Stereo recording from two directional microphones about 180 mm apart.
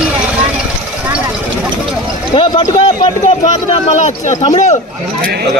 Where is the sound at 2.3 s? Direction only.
30° left (ahead or behind).